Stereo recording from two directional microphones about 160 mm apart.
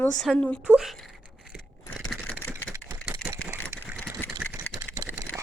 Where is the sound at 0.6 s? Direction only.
5° right (ahead or behind).